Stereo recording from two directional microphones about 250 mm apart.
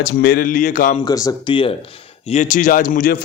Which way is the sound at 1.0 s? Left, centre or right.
Centre.